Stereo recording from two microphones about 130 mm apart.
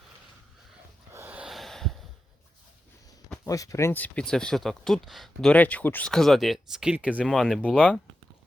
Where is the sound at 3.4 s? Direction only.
25° left (ahead or behind); by 7.2 s 10° right (ahead or behind).